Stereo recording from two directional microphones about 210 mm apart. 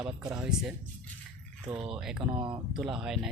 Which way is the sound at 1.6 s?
25° right (ahead or behind).